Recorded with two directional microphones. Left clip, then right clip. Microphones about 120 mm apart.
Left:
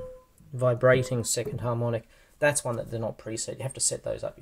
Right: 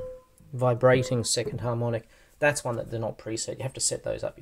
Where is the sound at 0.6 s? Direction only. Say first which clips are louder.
Even; 20° right (ahead or behind).